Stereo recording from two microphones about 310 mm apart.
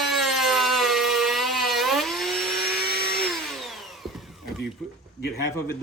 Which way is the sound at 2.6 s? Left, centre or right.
Left.